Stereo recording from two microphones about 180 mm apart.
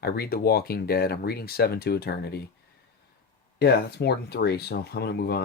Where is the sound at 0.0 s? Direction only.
60° left (ahead or behind).